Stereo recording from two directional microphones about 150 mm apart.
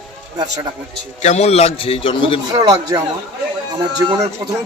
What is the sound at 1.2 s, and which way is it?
A man's voice, 50° left (ahead or behind).